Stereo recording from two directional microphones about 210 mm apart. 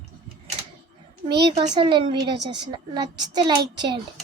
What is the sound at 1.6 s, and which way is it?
A woman's voice, 25° right (ahead or behind).